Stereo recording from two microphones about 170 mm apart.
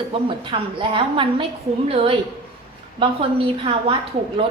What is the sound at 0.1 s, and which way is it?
A woman's voice, 30° right (ahead or behind).